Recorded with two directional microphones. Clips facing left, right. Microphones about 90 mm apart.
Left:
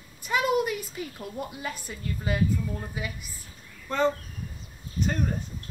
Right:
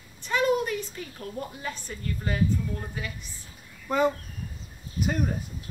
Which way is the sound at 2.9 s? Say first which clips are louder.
Left 1 dB; 10° left (ahead or behind).